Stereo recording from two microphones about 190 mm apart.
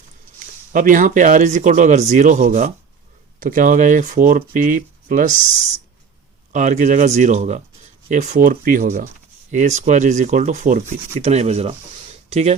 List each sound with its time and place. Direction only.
0.7 s speech: 45° right (ahead or behind)
6.5 s speech: 40° right (ahead or behind)